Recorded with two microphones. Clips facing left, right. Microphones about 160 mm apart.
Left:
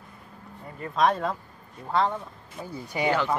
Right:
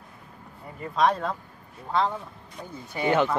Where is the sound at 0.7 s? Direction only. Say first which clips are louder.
Even; centre (ahead or behind).